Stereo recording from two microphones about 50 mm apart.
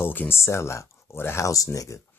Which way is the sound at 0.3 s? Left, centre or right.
Left.